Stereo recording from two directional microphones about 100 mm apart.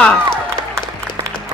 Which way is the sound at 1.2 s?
45° right (ahead or behind).